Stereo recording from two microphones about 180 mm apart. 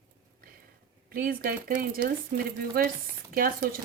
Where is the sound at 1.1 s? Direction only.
50° right (ahead or behind).